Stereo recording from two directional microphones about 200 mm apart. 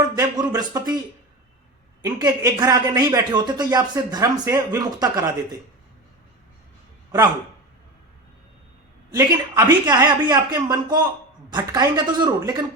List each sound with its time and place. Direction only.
0.2 s a sound: 20° right (ahead or behind)
2.0 s a man's voice: 20° right (ahead or behind)
9.1 s speech: 20° right (ahead or behind)